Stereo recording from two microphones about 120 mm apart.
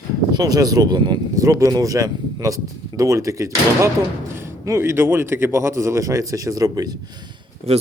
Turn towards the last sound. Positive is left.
turn(degrees=-60)  # may be behind; listen again after turning